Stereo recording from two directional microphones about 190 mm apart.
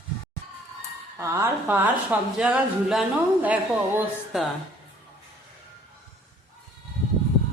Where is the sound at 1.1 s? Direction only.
15° right (ahead or behind).